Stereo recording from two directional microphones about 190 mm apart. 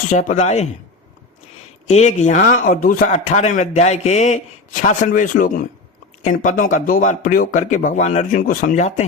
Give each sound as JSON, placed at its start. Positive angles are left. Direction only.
{"t": 0.1, "sound": "a man's voice", "side_deg": 40}
{"t": 1.9, "sound": "a man's voice", "side_deg": 35}